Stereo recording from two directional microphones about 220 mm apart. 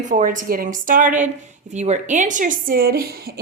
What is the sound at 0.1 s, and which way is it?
A woman's voice, 35° right (ahead or behind).